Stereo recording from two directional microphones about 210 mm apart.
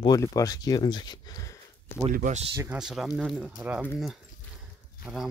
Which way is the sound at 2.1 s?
40° right (ahead or behind).